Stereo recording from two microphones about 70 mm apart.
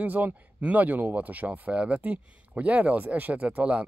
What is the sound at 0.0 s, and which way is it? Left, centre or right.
Speech, right.